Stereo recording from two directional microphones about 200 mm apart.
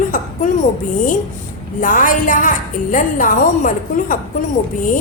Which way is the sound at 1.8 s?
40° left (ahead or behind).